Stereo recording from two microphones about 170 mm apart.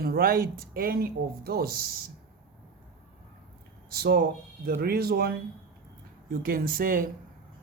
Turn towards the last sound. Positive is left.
turn(degrees=-55)  # may be behind; listen again after turning